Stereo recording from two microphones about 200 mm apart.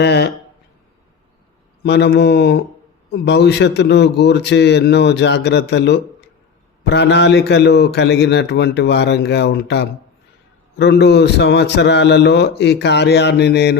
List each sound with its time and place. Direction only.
0.0 s a man's voice: 60° left (ahead or behind)
1.8 s a man's voice: 55° left (ahead or behind)